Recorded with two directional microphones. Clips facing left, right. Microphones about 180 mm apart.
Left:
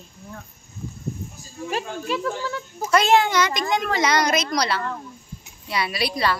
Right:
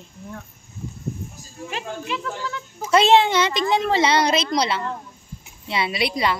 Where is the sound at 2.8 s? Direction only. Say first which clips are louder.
Right 2 dB; 25° right (ahead or behind).